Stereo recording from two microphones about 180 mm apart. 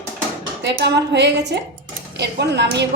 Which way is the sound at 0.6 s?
75° right (ahead or behind).